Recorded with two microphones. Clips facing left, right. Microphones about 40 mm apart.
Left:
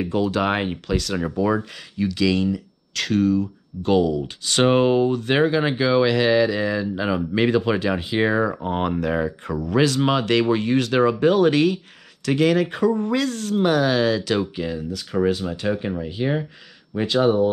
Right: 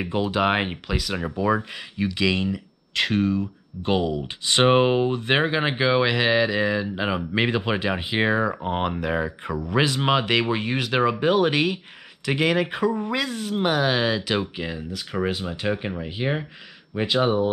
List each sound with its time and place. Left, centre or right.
0.0 s speech: right
9.8 s speech: right